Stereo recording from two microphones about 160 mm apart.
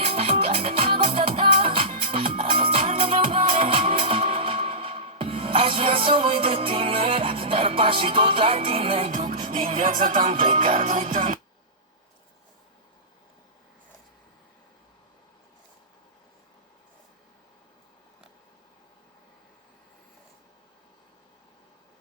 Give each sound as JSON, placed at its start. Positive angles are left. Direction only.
{"t": 0.0, "sound": "music", "side_deg": -35}
{"t": 10.2, "sound": "music", "side_deg": -45}